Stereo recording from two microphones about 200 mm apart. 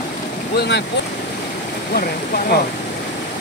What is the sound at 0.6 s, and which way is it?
Speech, 55° left (ahead or behind).